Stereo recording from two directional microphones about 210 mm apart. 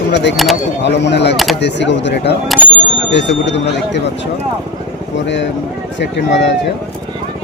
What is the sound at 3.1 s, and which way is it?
Speech, 55° left (ahead or behind).